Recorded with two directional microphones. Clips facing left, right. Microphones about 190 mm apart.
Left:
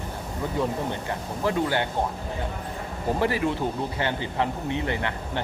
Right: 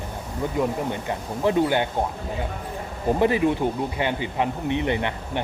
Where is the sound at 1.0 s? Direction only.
20° right (ahead or behind).